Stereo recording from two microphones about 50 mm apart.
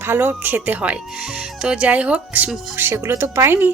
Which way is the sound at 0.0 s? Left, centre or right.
Right.